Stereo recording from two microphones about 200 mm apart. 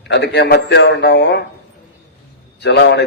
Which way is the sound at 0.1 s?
60° left (ahead or behind).